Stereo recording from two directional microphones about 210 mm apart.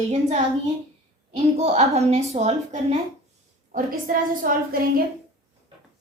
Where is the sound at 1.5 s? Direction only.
30° right (ahead or behind).